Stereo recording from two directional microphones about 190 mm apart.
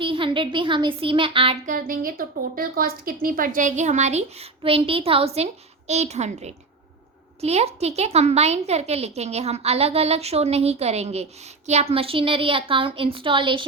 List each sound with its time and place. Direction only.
0.0 s a child's voice: 25° right (ahead or behind)
1.6 s a woman's voice: 45° right (ahead or behind); by 13.7 s 25° right (ahead or behind)